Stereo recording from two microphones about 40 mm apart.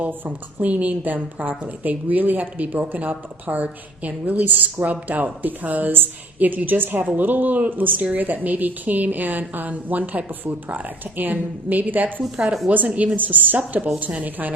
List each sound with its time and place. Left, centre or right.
0.0 s a woman's voice: right
12.9 s a woman's voice: right
13.6 s a woman's voice: right
14.2 s a woman's voice: right